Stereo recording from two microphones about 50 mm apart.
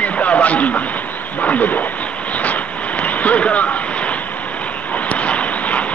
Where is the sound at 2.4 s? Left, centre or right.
Left.